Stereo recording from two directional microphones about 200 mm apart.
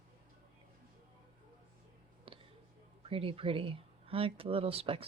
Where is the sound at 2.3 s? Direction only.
25° right (ahead or behind).